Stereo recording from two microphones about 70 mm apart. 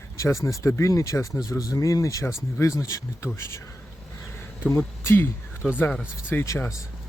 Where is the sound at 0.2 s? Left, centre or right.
Left.